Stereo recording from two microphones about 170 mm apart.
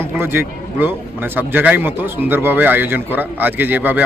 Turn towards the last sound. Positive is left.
turn(degrees=-10)  # may be behind; listen again after turning